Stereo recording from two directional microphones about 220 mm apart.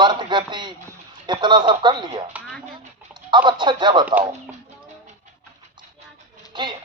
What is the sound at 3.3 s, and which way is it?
Speech, 20° right (ahead or behind).